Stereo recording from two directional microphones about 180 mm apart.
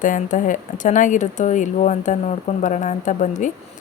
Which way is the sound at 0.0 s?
45° left (ahead or behind).